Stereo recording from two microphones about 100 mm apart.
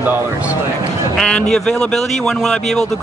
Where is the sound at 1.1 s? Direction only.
10° left (ahead or behind).